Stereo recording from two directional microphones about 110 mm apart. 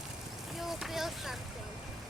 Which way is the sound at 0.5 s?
Centre (ahead or behind).